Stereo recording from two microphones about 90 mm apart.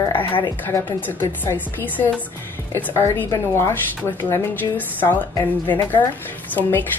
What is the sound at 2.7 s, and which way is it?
Speech, 30° left (ahead or behind).